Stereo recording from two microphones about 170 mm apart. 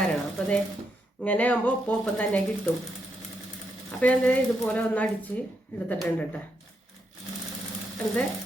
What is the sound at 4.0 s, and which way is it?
Speech, 10° left (ahead or behind).